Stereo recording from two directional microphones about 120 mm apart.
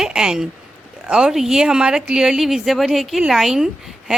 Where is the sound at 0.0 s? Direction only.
5° right (ahead or behind).